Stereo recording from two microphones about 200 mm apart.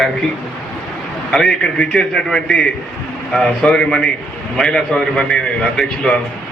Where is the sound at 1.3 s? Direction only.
5° left (ahead or behind).